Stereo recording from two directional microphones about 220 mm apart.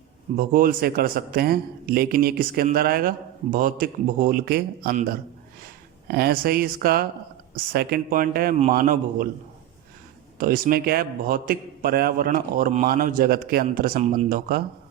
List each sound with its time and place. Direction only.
0.3 s speech: 40° right (ahead or behind)
6.1 s speech: 45° right (ahead or behind)
10.3 s speech: 40° right (ahead or behind)